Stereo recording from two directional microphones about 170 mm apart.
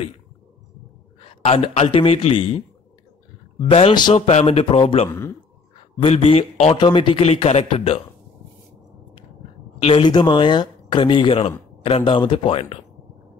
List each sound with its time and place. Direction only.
1.2 s a man's voice: 35° left (ahead or behind)
9.8 s a man's voice: 30° left (ahead or behind)